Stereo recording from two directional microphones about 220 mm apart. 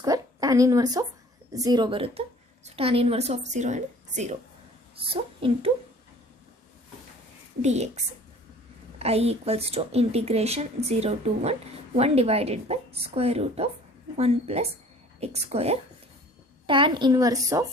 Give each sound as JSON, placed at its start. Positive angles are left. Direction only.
{"t": 0.0, "sound": "a sound", "side_deg": -15}
{"t": 1.5, "sound": "a woman's voice", "side_deg": -15}
{"t": 7.6, "sound": "a woman's voice", "side_deg": -30}